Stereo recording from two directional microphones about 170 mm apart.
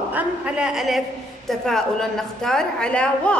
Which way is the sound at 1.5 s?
5° left (ahead or behind).